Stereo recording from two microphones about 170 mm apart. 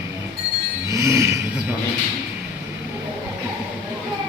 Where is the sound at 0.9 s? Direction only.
15° right (ahead or behind).